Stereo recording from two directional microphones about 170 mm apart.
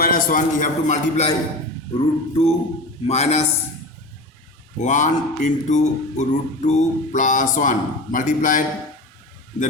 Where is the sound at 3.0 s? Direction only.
40° left (ahead or behind).